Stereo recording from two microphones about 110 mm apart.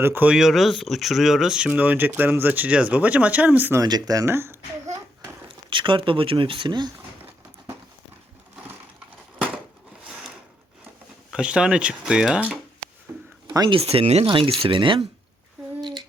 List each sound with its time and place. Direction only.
0.0 s speech: 15° right (ahead or behind)
0.3 s speech: centre (ahead or behind)
3.8 s speech: 35° right (ahead or behind)
5.7 s speech: 50° right (ahead or behind)
10.0 s sewing machine: 5° right (ahead or behind)
11.3 s speech: 10° right (ahead or behind)
13.1 s a sound: 15° right (ahead or behind)
13.7 s speech: 60° right (ahead or behind)
14.3 s speech: 55° right (ahead or behind)
15.8 s humming: 45° right (ahead or behind)